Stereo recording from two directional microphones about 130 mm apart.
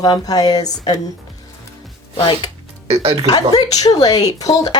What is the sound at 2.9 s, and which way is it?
Speech, 50° right (ahead or behind).